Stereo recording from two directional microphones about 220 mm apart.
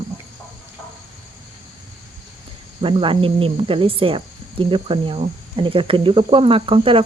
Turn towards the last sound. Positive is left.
turn(degrees=-25)  # may be behind; listen again after turning